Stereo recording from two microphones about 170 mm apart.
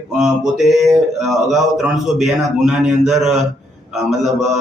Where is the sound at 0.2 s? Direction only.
Centre (ahead or behind).